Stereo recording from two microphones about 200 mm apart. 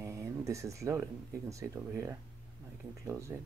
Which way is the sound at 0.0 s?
15° right (ahead or behind).